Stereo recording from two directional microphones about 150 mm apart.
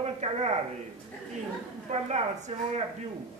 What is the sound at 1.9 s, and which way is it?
Speech, 45° right (ahead or behind).